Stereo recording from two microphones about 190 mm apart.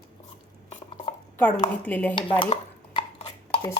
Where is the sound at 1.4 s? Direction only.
10° left (ahead or behind).